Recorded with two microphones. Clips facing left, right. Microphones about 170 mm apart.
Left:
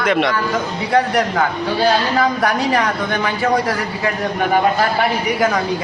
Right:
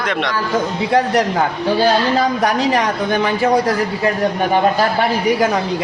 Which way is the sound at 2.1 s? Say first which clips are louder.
Right 1 dB; 20° right (ahead or behind).